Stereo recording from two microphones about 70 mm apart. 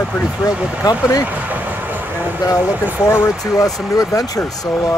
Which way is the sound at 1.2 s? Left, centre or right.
Right.